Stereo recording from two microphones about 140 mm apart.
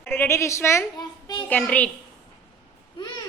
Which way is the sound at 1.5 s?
10° left (ahead or behind).